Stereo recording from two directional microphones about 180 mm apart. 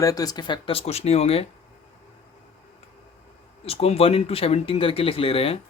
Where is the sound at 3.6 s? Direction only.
35° left (ahead or behind).